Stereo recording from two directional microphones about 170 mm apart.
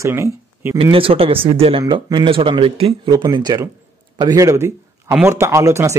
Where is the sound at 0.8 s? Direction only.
30° right (ahead or behind).